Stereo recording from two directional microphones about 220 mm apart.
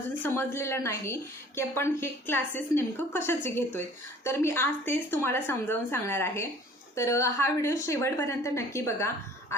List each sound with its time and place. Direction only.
0.1 s a woman's voice: 10° left (ahead or behind)